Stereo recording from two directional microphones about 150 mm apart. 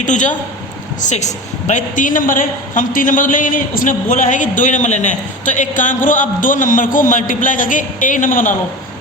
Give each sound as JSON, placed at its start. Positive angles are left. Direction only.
{"t": 0.0, "sound": "a woman's voice", "side_deg": 55}